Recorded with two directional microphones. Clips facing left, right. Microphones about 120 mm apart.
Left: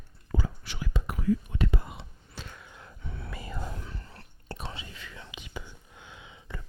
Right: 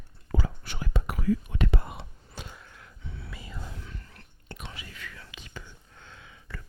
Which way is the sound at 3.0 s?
50° left (ahead or behind).